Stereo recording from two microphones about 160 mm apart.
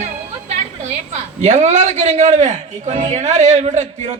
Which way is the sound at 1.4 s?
45° right (ahead or behind).